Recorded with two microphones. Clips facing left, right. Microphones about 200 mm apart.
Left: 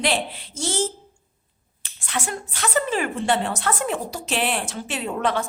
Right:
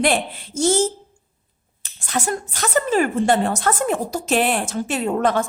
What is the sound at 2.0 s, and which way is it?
A woman's voice, 40° right (ahead or behind).